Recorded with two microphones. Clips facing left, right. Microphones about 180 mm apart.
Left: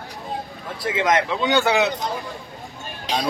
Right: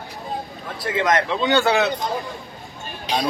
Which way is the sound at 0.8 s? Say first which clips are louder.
Even; 10° left (ahead or behind).